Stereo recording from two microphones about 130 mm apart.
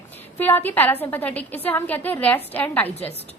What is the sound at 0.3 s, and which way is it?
A woman's voice, 15° left (ahead or behind).